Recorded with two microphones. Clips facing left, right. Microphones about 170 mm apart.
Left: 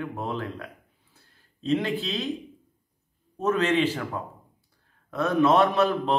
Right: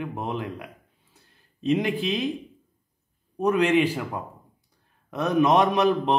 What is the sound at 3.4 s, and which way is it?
Speech, 15° right (ahead or behind).